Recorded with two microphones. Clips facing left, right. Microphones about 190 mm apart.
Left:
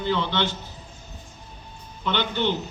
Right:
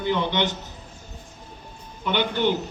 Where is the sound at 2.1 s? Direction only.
10° right (ahead or behind).